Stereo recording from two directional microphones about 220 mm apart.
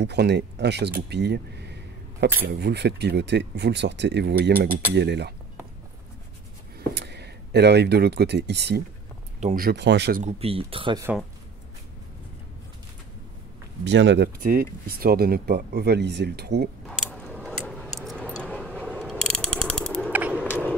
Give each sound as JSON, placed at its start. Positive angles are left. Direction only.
{"t": 0.0, "sound": "speech", "side_deg": -50}
{"t": 6.9, "sound": "speech", "side_deg": -50}
{"t": 9.4, "sound": "speech", "side_deg": -30}
{"t": 9.7, "sound": "speech", "side_deg": -50}
{"t": 10.2, "sound": "speech", "side_deg": -25}
{"t": 13.8, "sound": "speech", "side_deg": -55}
{"t": 14.4, "sound": "speech", "side_deg": -40}
{"t": 16.8, "sound": "a sound", "side_deg": 5}
{"t": 17.9, "sound": "keys jangling", "side_deg": 0}
{"t": 18.8, "sound": "mechanisms", "side_deg": 0}
{"t": 20.1, "sound": "a sound", "side_deg": -5}
{"t": 20.4, "sound": "a sound", "side_deg": 10}